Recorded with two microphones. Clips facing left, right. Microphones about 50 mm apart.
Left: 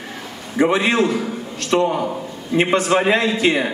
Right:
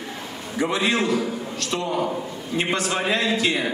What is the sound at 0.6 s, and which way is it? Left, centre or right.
A man's voice, left.